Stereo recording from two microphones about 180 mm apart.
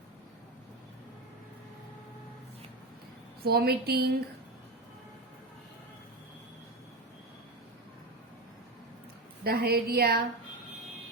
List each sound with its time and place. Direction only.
3.4 s a woman's voice: 60° right (ahead or behind)
9.4 s a woman's voice: 60° right (ahead or behind)